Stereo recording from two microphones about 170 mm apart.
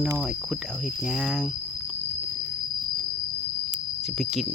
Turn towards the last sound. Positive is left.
turn(degrees=0)  # may be behind; listen again after turning